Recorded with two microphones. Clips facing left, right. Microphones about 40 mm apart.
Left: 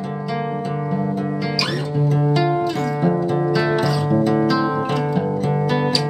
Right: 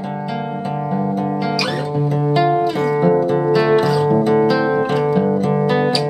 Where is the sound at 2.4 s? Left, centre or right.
Centre.